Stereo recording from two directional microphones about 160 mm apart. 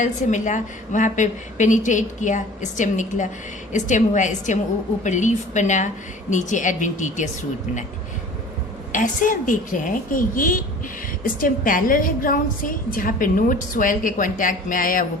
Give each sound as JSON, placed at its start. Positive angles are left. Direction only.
{"t": 0.0, "sound": "a woman's voice", "side_deg": 50}
{"t": 8.9, "sound": "a woman's voice", "side_deg": 55}